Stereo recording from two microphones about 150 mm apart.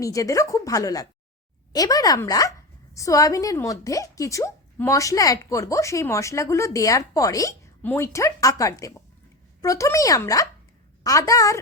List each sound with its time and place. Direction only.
0.0 s a woman's voice: 20° left (ahead or behind)